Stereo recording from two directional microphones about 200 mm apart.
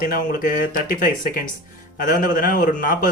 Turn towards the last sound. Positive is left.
turn(degrees=45)  # may be behind; listen again after turning